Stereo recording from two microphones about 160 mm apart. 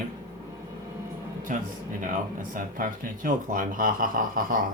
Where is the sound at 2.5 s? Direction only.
60° right (ahead or behind).